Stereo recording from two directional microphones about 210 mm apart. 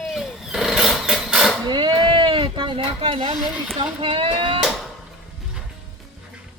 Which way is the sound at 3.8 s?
25° right (ahead or behind).